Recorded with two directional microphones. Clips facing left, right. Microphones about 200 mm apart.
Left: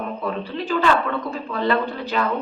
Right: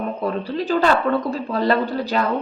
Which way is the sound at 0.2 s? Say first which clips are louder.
Right 3 dB; 40° right (ahead or behind).